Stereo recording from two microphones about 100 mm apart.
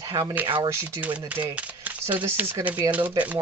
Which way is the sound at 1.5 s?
15° right (ahead or behind).